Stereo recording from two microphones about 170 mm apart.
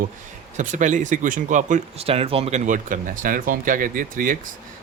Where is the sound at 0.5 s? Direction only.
45° right (ahead or behind).